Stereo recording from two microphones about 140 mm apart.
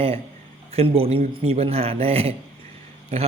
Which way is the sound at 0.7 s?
40° right (ahead or behind).